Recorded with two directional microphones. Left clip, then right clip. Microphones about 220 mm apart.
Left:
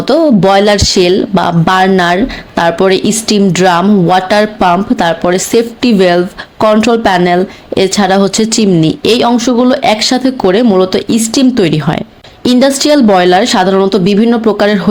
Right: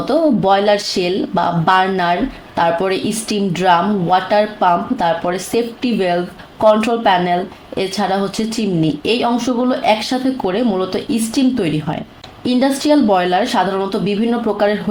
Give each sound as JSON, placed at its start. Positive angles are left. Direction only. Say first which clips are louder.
{"t": 0.1, "sound": "speech", "louder": "left 6 dB", "side_deg": 45}